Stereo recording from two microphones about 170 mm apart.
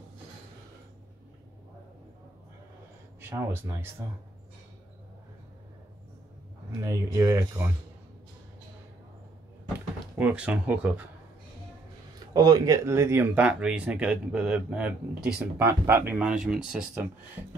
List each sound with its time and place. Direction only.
3.2 s speech: 15° right (ahead or behind)
6.8 s speech: 15° right (ahead or behind)
10.1 s speech: 5° right (ahead or behind)
12.4 s speech: 20° right (ahead or behind); by 17.0 s 5° right (ahead or behind)